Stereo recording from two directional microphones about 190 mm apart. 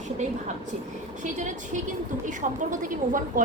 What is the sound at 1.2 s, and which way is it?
A woman's voice, 40° right (ahead or behind).